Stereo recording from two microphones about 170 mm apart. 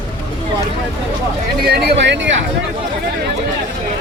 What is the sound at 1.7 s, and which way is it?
Speech, 80° right.